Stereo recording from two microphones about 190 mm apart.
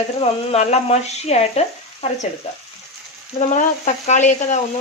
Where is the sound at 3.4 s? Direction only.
40° left (ahead or behind).